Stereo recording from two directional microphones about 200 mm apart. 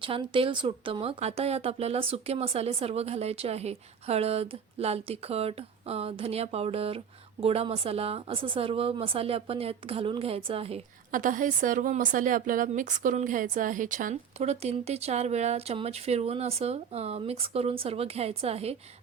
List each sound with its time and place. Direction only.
0.0 s a woman's voice: 25° right (ahead or behind)
11.1 s a woman's voice: 40° right (ahead or behind)